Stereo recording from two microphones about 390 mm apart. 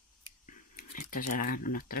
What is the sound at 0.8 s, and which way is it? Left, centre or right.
Typing, left.